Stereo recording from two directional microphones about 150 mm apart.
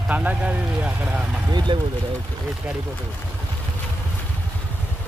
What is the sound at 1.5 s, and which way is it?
Speech, 30° right (ahead or behind).